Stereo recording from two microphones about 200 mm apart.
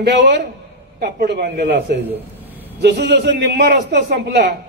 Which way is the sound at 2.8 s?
60° right (ahead or behind).